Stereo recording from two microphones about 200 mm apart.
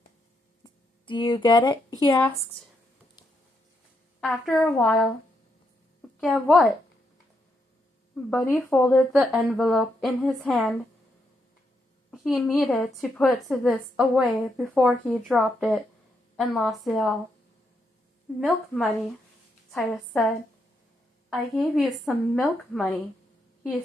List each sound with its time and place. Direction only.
0.6 s a woman's voice: 25° left (ahead or behind)
4.2 s a woman's voice: 5° left (ahead or behind)
6.1 s a woman's voice: 5° left (ahead or behind)
8.1 s a woman's voice: 5° left (ahead or behind)
9.1 s a woman's voice: 5° right (ahead or behind)
12.1 s a woman's voice: centre (ahead or behind)
18.3 s a woman's voice: centre (ahead or behind)